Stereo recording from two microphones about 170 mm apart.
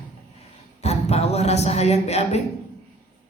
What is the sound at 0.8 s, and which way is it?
Speech, 40° left (ahead or behind).